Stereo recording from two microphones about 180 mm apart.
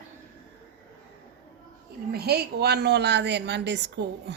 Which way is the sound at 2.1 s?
60° right (ahead or behind).